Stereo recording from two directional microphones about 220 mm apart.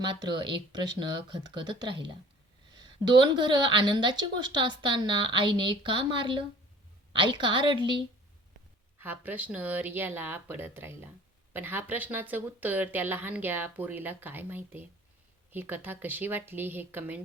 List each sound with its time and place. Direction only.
0.1 s a woman's voice: 20° right (ahead or behind)
9.0 s a woman's voice: 10° right (ahead or behind)